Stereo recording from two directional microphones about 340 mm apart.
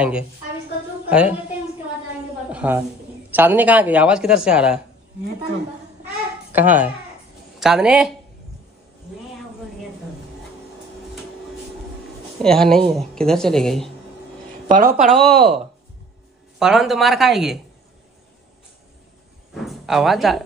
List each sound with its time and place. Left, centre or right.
1.1 s speech: centre
2.5 s a woman's voice: centre
6.5 s speech: centre
12.4 s speech: centre
14.7 s a woman's voice: right
15.0 s speech: centre
19.5 s a sound: centre